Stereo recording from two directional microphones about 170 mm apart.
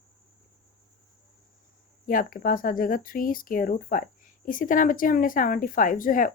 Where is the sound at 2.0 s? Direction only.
55° left (ahead or behind).